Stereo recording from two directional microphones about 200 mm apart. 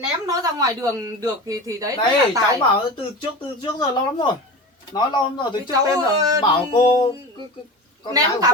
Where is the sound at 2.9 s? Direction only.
25° left (ahead or behind).